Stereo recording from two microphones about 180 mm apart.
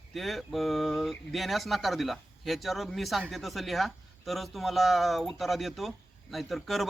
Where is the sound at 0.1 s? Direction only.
Centre (ahead or behind).